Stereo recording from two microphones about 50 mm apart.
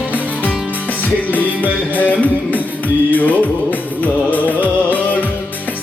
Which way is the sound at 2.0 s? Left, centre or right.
Left.